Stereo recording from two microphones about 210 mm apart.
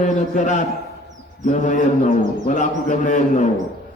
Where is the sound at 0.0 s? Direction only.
35° left (ahead or behind).